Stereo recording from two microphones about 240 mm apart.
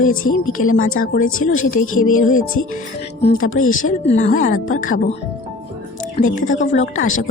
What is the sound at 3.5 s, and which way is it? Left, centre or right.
Speech, left.